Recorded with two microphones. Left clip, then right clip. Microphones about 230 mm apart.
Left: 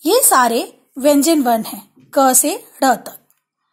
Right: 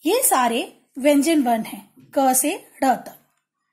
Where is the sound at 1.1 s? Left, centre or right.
Centre.